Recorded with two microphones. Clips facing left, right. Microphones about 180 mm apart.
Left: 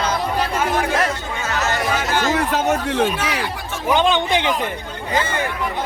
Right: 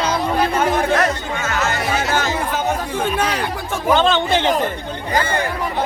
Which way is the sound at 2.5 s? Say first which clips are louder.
Left 2 dB; 75° left (ahead or behind).